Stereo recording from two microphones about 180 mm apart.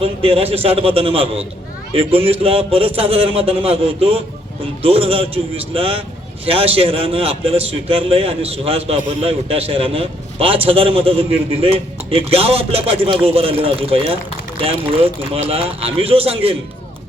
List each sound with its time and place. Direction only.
0.0 s a man's voice: 35° right (ahead or behind)